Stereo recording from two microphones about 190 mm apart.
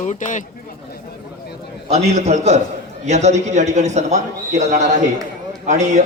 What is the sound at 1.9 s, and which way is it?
A man's voice, 35° right (ahead or behind).